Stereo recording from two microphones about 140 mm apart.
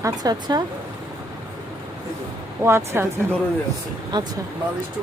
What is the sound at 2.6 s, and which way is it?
Speech, 20° right (ahead or behind).